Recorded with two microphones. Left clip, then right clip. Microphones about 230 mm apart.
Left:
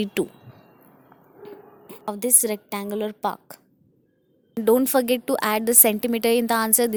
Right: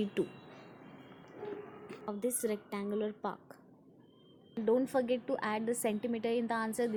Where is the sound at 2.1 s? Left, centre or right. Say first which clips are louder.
Left 10 dB; left.